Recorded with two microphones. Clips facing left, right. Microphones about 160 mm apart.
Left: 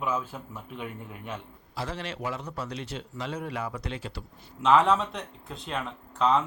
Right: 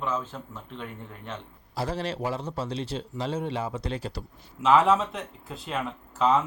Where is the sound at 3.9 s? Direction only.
40° right (ahead or behind).